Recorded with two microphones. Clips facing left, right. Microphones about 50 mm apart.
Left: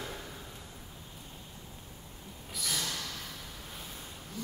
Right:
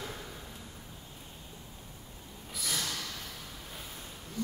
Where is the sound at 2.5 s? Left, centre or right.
Centre.